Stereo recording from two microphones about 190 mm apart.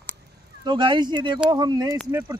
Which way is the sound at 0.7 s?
25° right (ahead or behind).